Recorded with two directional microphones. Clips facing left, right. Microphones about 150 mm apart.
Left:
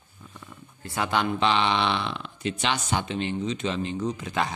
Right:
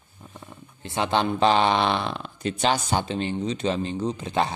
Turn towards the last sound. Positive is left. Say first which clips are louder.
# right 3 dB
turn(degrees=-30)  # may be behind; listen again after turning